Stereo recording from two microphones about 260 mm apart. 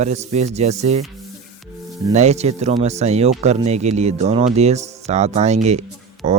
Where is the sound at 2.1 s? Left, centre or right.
Right.